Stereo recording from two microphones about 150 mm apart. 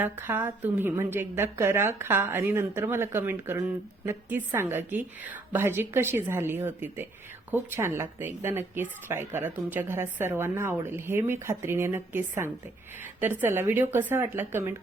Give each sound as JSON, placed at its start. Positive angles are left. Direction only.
{"t": 0.0, "sound": "speech", "side_deg": -15}